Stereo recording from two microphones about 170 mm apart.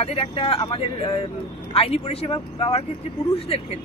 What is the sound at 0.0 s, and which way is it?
Speech, 35° left (ahead or behind).